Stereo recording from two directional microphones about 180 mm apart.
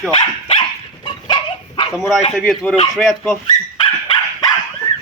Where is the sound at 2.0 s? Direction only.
Centre (ahead or behind).